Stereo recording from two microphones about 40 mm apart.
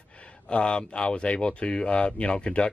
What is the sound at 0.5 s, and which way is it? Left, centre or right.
Speech, left.